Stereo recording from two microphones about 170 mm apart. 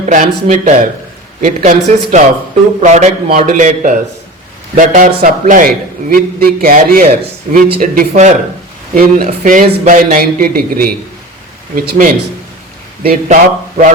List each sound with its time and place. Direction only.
0.0 s a man's voice: 45° right (ahead or behind)